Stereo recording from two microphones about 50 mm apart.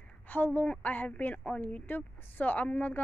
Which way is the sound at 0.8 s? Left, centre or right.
Left.